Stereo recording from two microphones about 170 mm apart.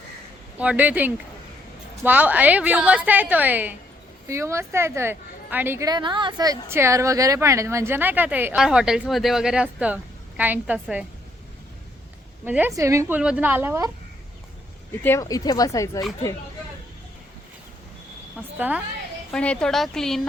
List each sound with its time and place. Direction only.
0.6 s a woman's voice: 10° right (ahead or behind)
5.9 s a woman's voice: 25° right (ahead or behind); by 11.0 s 10° right (ahead or behind)
12.5 s a woman's voice: 10° right (ahead or behind)
15.0 s speech: 15° left (ahead or behind)
18.5 s a woman's voice: 10° right (ahead or behind)
19.3 s a woman's voice: 5° left (ahead or behind)